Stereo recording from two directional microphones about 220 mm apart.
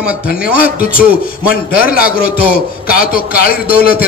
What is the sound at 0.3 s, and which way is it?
A man's voice, 40° left (ahead or behind).